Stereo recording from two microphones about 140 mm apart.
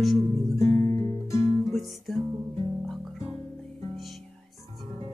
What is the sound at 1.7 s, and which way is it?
Music, centre (ahead or behind).